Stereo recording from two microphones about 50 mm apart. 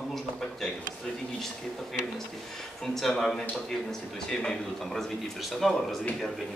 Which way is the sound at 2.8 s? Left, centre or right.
Centre.